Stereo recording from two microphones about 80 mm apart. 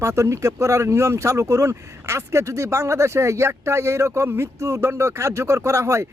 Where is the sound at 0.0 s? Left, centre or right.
Right.